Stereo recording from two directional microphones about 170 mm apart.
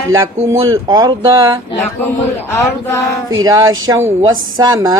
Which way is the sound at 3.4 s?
20° right (ahead or behind).